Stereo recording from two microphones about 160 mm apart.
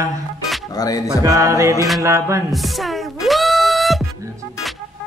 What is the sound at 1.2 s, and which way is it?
A man's voice, 20° right (ahead or behind).